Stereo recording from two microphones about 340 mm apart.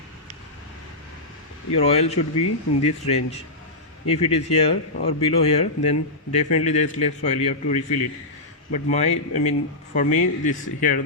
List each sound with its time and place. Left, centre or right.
1.7 s a man's voice: centre